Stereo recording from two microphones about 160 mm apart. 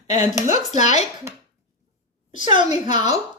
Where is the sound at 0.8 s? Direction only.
45° left (ahead or behind).